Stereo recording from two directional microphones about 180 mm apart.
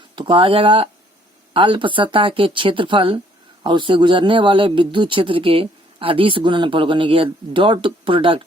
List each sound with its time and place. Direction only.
0.2 s a man's voice: 30° right (ahead or behind)